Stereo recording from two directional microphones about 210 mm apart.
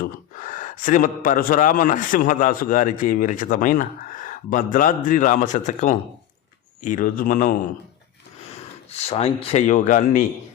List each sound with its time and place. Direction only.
0.0 s a man's voice: 40° left (ahead or behind)
8.5 s speech: 30° left (ahead or behind)